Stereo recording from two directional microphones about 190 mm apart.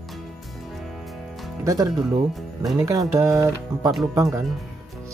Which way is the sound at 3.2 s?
15° right (ahead or behind).